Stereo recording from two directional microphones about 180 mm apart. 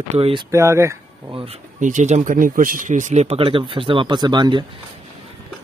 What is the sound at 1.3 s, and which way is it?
Speech, 30° right (ahead or behind).